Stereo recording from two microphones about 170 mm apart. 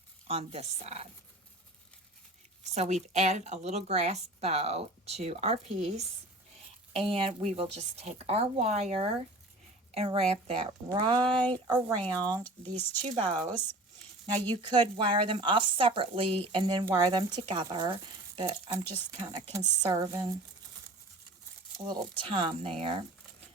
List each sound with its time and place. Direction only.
0.3 s speech: 35° right (ahead or behind)
2.7 s speech: 40° right (ahead or behind); by 12.4 s 25° right (ahead or behind)
12.4 s speech: 10° left (ahead or behind)
13.1 s speech: 35° right (ahead or behind)
14.5 s speech: 25° right (ahead or behind)
22.2 s speech: 30° right (ahead or behind)